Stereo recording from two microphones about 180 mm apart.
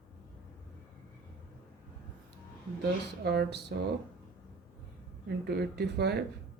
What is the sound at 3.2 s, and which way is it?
Speech, 65° right (ahead or behind).